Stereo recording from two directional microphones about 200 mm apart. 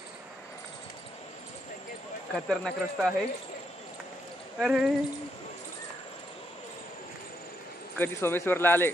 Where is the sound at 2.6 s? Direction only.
Centre (ahead or behind).